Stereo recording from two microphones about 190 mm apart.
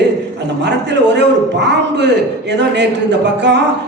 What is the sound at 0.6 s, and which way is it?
A woman's voice, 65° right (ahead or behind).